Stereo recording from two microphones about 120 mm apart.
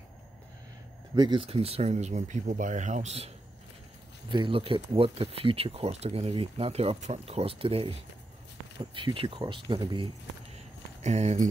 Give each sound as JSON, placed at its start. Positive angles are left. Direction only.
{"t": 1.1, "sound": "speech", "side_deg": -35}
{"t": 1.4, "sound": "speech", "side_deg": -55}
{"t": 4.3, "sound": "speech", "side_deg": -45}
{"t": 8.9, "sound": "speech", "side_deg": -45}
{"t": 11.0, "sound": "speech", "side_deg": -70}